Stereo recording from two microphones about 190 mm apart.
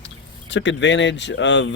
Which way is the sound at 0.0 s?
70° left (ahead or behind).